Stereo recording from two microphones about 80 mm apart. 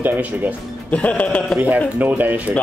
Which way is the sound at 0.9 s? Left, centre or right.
Centre.